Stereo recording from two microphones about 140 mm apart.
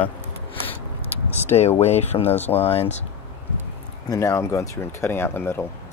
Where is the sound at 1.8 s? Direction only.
50° left (ahead or behind).